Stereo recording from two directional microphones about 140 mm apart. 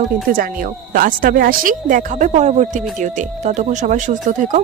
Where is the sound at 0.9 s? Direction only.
85° right.